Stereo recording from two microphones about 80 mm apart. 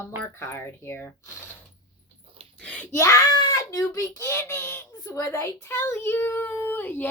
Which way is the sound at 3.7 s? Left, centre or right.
Left.